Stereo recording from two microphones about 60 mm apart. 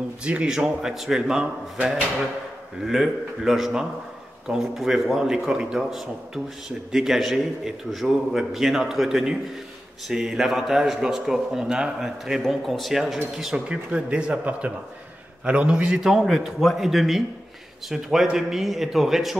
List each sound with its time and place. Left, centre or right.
0.2 s speech: centre
2.8 s a man's voice: centre
12.4 s a man's voice: centre